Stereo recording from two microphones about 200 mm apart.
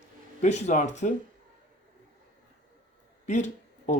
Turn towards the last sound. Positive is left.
turn(degrees=35)  # may be behind; listen again after turning